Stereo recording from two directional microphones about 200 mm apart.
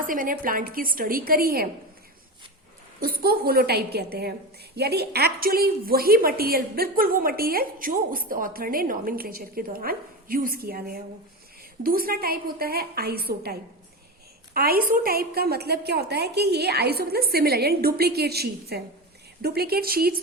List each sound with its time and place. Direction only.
0.0 s a woman's voice: 45° right (ahead or behind)
3.0 s a woman's voice: 50° right (ahead or behind)